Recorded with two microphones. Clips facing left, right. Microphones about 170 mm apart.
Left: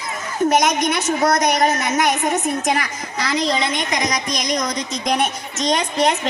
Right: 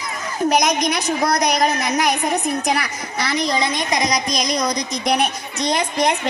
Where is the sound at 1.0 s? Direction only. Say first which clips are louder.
Left 3 dB; 35° right (ahead or behind).